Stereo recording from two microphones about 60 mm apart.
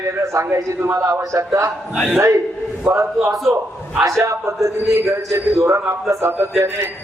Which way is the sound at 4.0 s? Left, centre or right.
Right.